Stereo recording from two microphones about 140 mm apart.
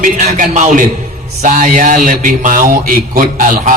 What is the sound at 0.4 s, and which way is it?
A man's voice, 60° right (ahead or behind).